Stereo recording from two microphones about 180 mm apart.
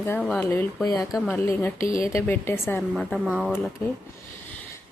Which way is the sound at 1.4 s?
15° left (ahead or behind).